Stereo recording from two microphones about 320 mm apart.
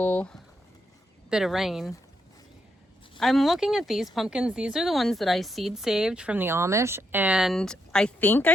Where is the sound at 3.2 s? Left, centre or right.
Centre.